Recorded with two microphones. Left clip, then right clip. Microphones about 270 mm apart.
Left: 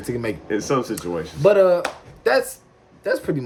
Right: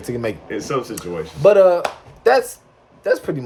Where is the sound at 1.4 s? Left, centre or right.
Centre.